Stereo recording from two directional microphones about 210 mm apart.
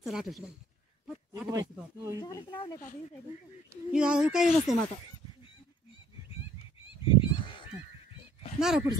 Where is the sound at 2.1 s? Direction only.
20° left (ahead or behind).